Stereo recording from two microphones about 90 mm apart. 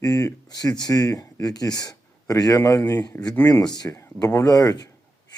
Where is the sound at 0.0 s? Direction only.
40° left (ahead or behind).